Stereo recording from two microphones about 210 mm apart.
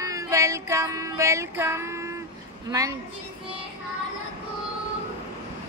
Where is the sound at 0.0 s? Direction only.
15° right (ahead or behind).